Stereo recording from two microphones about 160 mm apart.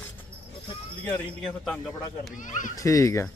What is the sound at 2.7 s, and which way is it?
Speech, 20° left (ahead or behind).